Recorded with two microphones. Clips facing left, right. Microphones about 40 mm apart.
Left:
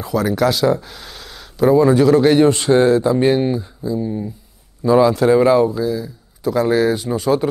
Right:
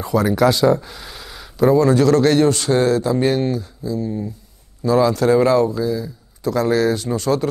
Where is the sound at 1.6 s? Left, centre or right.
Centre.